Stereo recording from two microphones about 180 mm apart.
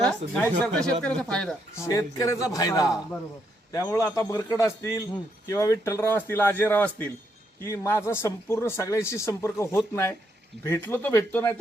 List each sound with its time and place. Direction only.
0.0 s speech: 5° left (ahead or behind)
1.8 s speech: 20° left (ahead or behind)